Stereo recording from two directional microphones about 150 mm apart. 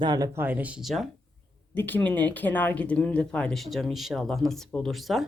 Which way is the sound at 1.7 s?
10° left (ahead or behind).